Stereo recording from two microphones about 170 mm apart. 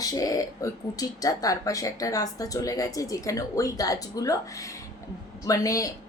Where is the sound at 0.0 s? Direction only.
20° left (ahead or behind).